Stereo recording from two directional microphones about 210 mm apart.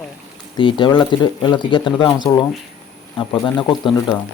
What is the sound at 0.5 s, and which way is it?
Speech, 25° left (ahead or behind).